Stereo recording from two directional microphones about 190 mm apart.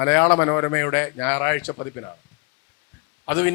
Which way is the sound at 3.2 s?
10° left (ahead or behind).